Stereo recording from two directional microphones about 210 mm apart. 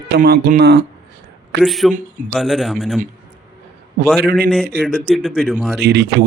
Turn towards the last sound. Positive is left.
turn(degrees=-50)  # may be behind; listen again after turning